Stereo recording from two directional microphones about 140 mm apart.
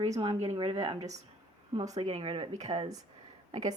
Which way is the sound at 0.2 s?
45° right (ahead or behind).